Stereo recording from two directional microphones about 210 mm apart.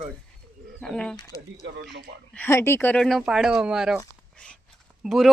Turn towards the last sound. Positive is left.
turn(degrees=0)  # may be behind; listen again after turning